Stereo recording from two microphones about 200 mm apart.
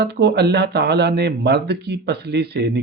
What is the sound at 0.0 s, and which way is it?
Speech, 55° right (ahead or behind).